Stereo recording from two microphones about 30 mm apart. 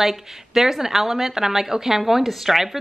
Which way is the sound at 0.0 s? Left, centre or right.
Centre.